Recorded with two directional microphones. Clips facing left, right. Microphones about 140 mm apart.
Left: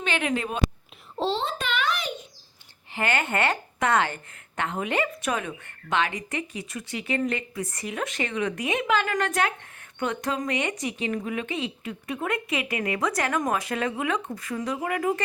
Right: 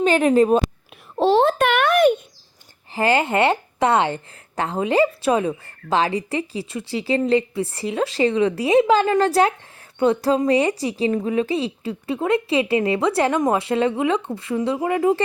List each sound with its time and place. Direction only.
0.0 s speech: 40° right (ahead or behind)
1.1 s babbling: 60° right (ahead or behind)
2.9 s a woman's voice: 30° right (ahead or behind)